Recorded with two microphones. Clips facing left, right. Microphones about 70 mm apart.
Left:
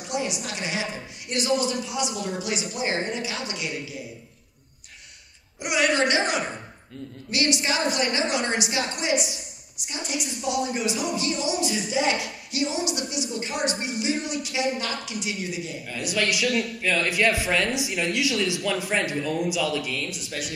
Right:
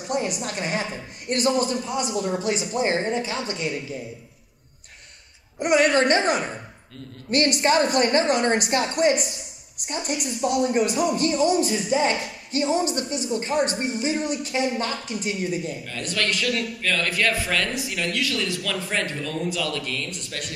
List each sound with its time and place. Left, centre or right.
0.1 s a woman's voice: right
5.6 s a man's voice: right
15.9 s a man's voice: centre